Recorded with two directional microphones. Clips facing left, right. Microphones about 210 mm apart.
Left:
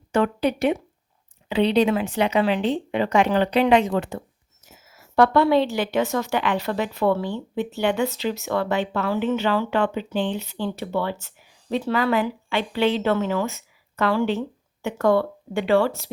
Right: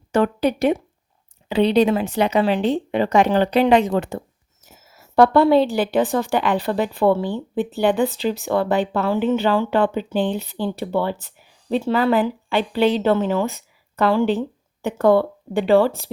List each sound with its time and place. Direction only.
0.1 s speech: 40° right (ahead or behind)